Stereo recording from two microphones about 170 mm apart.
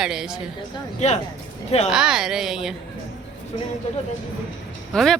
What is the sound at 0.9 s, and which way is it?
Speech, 40° left (ahead or behind).